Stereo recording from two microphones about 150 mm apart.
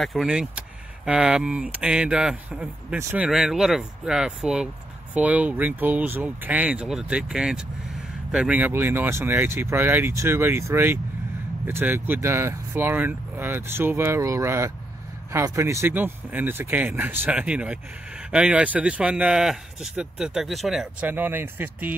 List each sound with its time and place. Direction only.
0.0 s speech: centre (ahead or behind)
3.3 s speech: 5° right (ahead or behind)